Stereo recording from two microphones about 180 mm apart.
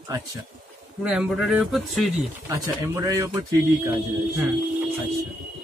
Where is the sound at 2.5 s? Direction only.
15° right (ahead or behind).